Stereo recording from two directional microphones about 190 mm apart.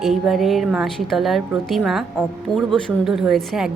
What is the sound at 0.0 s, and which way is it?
A woman's voice, centre (ahead or behind).